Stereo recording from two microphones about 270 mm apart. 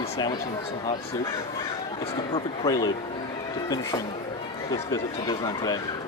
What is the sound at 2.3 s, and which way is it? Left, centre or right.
Speech, centre.